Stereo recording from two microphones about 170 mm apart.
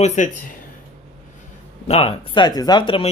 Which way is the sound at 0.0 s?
45° left (ahead or behind).